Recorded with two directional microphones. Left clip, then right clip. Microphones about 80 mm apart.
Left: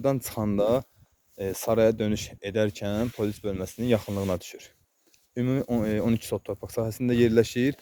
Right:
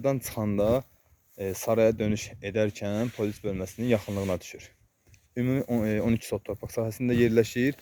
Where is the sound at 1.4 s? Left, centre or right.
Left.